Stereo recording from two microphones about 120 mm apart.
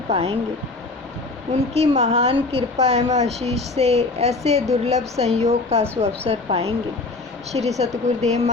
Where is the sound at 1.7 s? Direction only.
60° right (ahead or behind).